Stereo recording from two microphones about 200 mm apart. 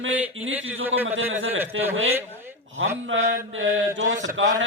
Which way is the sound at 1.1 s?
75° right (ahead or behind).